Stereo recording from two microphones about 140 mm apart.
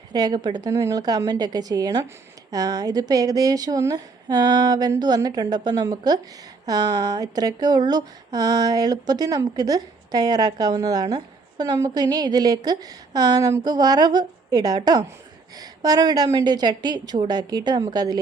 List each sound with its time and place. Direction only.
0.1 s speech: 30° right (ahead or behind)